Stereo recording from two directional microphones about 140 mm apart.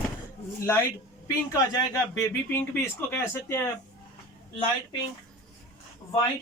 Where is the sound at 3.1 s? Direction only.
15° left (ahead or behind).